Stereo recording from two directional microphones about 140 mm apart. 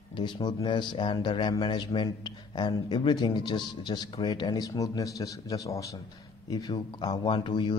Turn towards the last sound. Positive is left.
turn(degrees=35)  # may be behind; listen again after turning